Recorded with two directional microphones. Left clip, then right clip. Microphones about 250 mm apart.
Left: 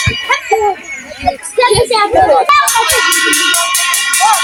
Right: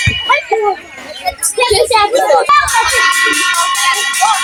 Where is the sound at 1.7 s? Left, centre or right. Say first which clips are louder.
Right 2 dB; centre.